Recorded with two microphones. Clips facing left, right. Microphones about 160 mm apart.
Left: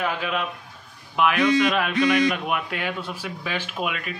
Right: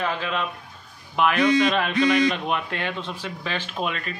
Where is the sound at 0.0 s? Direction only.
10° left (ahead or behind).